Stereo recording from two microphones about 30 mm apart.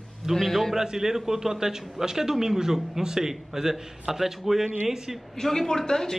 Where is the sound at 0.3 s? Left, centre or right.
Centre.